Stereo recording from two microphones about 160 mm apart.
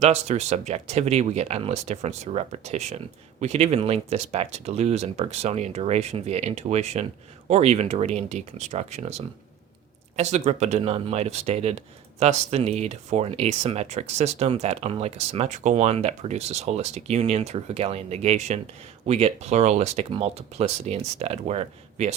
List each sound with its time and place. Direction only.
0.0 s speech: 45° right (ahead or behind)
10.2 s speech: 45° right (ahead or behind)